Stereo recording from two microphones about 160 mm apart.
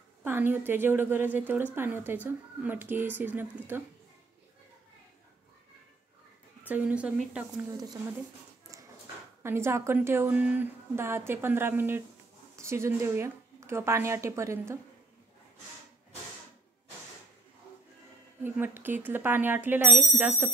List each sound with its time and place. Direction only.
0.2 s a woman's voice: 10° right (ahead or behind)
6.7 s a woman's voice: 10° right (ahead or behind)
7.5 s speech: 25° right (ahead or behind)
9.4 s a woman's voice: 15° right (ahead or behind)
18.4 s a woman's voice: 15° right (ahead or behind)